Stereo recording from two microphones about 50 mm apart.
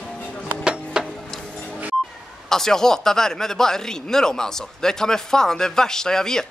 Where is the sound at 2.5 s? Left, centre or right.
Centre.